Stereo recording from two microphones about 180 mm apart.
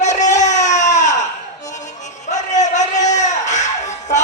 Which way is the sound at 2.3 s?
40° left (ahead or behind).